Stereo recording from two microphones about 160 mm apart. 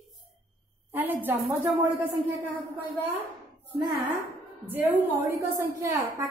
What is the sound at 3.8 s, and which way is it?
Speech, 25° right (ahead or behind).